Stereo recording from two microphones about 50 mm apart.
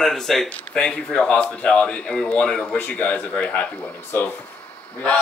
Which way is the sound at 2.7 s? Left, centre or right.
Left.